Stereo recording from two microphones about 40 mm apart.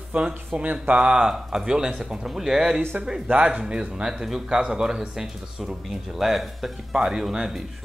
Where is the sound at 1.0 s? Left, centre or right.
Right.